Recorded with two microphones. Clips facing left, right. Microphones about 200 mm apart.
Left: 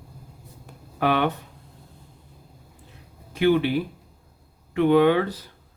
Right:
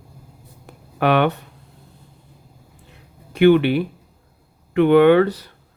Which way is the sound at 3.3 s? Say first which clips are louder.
Right 6 dB; 70° right (ahead or behind).